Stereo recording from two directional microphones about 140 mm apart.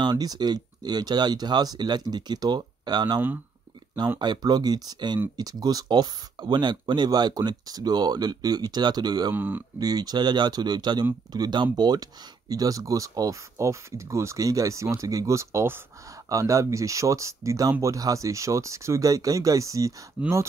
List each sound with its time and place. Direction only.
0.0 s speech: 30° right (ahead or behind)
4.2 s speech: 30° right (ahead or behind)
9.3 s speech: 15° right (ahead or behind)
9.8 s speech: 30° right (ahead or behind)